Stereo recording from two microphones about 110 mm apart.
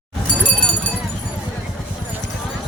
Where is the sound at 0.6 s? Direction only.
5° left (ahead or behind).